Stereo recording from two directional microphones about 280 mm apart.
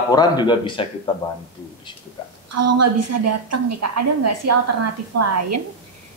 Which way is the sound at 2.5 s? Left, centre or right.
Right.